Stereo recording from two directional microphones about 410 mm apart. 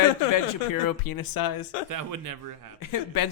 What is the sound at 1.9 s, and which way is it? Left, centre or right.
Speech, right.